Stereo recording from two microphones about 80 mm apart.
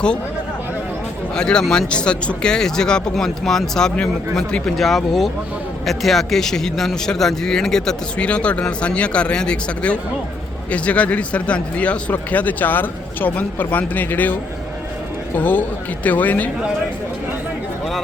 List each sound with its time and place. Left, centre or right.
1.4 s speech: centre
15.4 s speech: left